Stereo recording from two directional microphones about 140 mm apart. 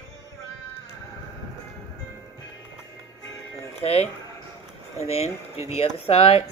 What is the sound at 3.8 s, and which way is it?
Speech, 45° left (ahead or behind).